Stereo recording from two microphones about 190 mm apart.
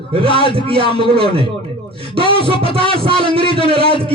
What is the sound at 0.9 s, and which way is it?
Music, 30° right (ahead or behind).